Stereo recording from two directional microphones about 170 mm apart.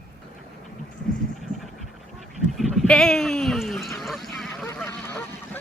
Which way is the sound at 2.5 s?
Centre (ahead or behind).